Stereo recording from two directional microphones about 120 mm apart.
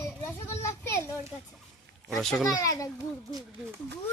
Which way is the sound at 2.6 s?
30° left (ahead or behind).